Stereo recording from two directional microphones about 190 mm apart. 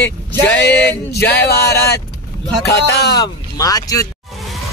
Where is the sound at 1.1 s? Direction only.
60° left (ahead or behind).